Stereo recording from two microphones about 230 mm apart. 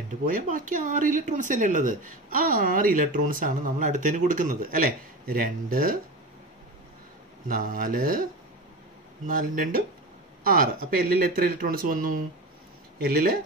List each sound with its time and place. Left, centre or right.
0.2 s speech: right
7.4 s speech: right